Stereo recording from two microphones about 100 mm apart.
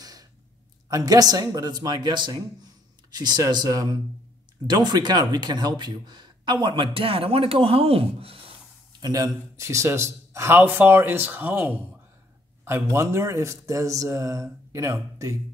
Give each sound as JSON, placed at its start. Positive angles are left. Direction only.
{"t": 0.0, "sound": "sigh", "side_deg": -40}
{"t": 0.8, "sound": "speech", "side_deg": -35}
{"t": 9.0, "sound": "a man's voice", "side_deg": -35}